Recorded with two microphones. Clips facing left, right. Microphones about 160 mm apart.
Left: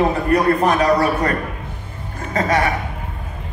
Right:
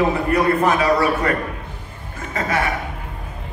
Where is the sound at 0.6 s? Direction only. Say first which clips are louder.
Left 1 dB; 35° left (ahead or behind).